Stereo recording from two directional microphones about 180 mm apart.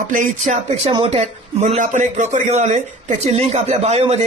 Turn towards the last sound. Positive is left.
turn(degrees=-35)  # may be behind; listen again after turning